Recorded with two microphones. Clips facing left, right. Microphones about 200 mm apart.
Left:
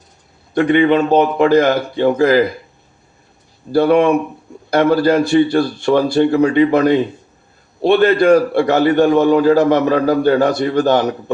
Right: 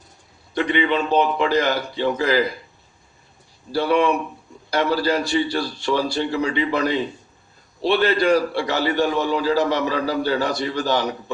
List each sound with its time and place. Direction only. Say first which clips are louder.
0.5 s a man's voice: left 8 dB; 50° left (ahead or behind)
3.7 s a man's voice: left 7 dB; 50° left (ahead or behind)